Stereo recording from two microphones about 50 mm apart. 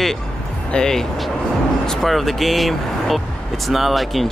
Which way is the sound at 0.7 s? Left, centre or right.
Centre.